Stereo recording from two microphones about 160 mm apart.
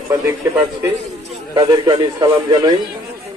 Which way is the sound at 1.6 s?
25° right (ahead or behind).